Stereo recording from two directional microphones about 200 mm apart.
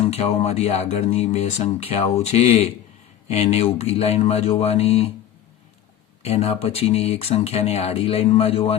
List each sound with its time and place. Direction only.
0.0 s speech: 30° left (ahead or behind)
6.2 s speech: 30° left (ahead or behind)